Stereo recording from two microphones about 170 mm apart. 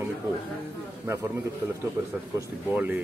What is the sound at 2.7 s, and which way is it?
Speech, 10° right (ahead or behind).